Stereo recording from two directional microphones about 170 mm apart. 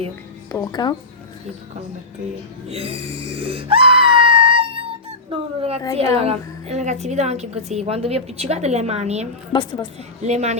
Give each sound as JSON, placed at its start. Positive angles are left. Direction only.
{"t": 0.5, "sound": "a woman's voice", "side_deg": 20}
{"t": 2.6, "sound": "a woman's voice", "side_deg": -35}
{"t": 9.5, "sound": "a woman's voice", "side_deg": 30}
{"t": 10.2, "sound": "a woman's voice", "side_deg": -40}